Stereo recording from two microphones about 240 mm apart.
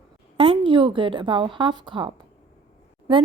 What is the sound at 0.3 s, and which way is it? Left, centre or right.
A woman's voice, right.